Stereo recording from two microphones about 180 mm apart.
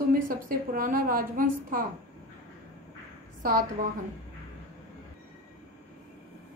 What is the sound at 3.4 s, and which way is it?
Speech, 50° right (ahead or behind).